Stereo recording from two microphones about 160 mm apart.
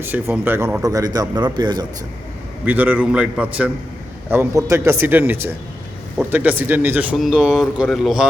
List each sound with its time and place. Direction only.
0.0 s a man's voice: 15° right (ahead or behind)
2.6 s speech: 10° right (ahead or behind)